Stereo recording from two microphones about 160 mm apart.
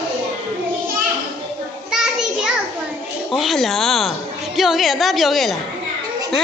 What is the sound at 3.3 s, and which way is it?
Speech, centre (ahead or behind).